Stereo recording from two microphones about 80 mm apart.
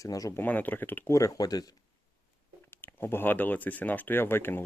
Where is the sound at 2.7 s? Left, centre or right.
Left.